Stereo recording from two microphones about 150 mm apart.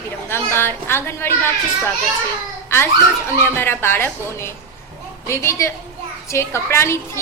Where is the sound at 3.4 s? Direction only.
15° left (ahead or behind).